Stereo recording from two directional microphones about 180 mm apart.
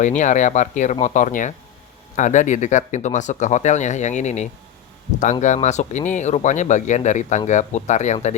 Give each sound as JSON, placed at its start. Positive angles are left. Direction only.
{"t": 0.0, "sound": "speech", "side_deg": 40}